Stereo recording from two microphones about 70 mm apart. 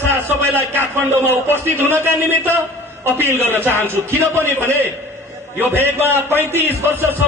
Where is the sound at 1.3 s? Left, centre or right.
Left.